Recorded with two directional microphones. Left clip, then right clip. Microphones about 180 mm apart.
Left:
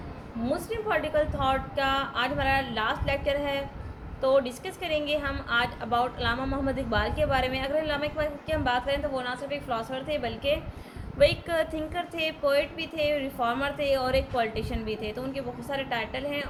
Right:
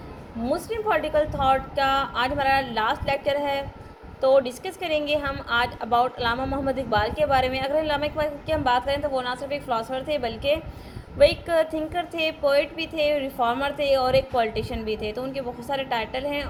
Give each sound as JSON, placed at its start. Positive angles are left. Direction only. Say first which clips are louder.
{"t": 0.7, "sound": "a woman's voice", "louder": "right 4 dB", "side_deg": -15}
{"t": 11.2, "sound": "a woman's voice", "louder": "right 4 dB", "side_deg": -5}